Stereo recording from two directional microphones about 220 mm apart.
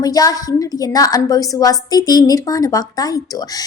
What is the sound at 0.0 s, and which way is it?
A woman's voice, 15° left (ahead or behind).